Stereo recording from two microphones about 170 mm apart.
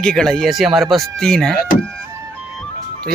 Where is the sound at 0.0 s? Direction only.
5° left (ahead or behind).